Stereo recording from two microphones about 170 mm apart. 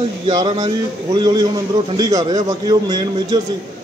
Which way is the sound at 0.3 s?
25° right (ahead or behind).